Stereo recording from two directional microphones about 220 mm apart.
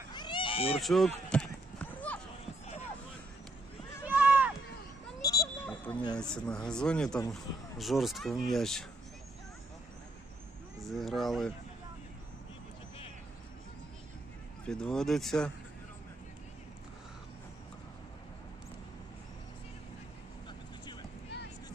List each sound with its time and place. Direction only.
0.1 s cat: 20° left (ahead or behind)
0.8 s run: centre (ahead or behind)
4.0 s run: 5° right (ahead or behind)
5.2 s a sound: 15° left (ahead or behind)
6.1 s speech: 5° left (ahead or behind)
10.8 s speech: centre (ahead or behind)
14.7 s speech: 5° left (ahead or behind)